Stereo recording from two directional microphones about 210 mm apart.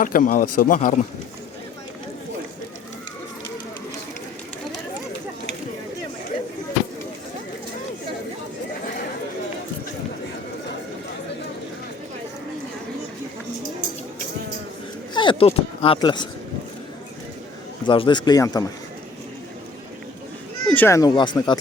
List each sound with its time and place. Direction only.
0.0 s speech: 40° left (ahead or behind)
15.1 s a sound: 20° left (ahead or behind)
17.8 s a man's voice: 25° left (ahead or behind)
20.7 s speech: 10° left (ahead or behind)